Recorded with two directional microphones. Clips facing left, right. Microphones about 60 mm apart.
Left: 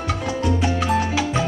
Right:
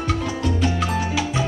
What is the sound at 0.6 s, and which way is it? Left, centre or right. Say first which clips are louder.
Music: left 2 dB; left.